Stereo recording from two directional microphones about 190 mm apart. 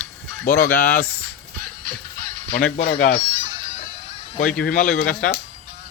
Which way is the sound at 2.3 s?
40° right (ahead or behind).